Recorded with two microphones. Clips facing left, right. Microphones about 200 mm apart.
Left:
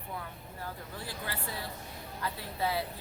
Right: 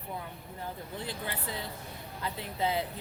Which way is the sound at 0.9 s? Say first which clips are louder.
Right 3 dB; 20° right (ahead or behind).